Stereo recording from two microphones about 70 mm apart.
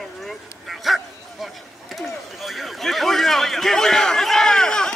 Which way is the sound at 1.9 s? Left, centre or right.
Centre.